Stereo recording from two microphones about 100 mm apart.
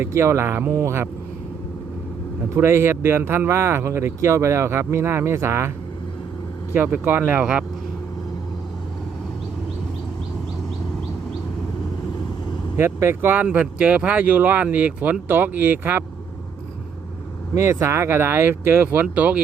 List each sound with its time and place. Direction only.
0.0 s speech: 30° right (ahead or behind)
2.6 s speech: 25° right (ahead or behind)
6.7 s speech: 20° right (ahead or behind)
12.7 s speech: 25° right (ahead or behind)
17.5 s speech: 30° right (ahead or behind); by 19.4 s 15° right (ahead or behind)